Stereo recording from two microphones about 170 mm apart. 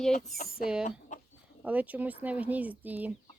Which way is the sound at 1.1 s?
45° left (ahead or behind).